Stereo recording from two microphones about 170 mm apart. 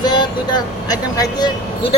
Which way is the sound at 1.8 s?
35° left (ahead or behind).